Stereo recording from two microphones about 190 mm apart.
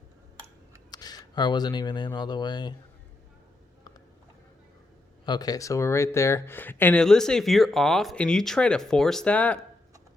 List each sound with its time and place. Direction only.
0.9 s speech: 20° left (ahead or behind)
5.2 s speech: 20° left (ahead or behind)